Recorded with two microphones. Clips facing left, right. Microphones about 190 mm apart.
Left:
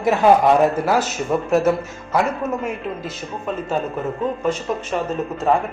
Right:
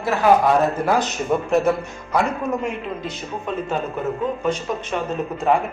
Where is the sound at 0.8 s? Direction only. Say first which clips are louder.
Even; 5° left (ahead or behind).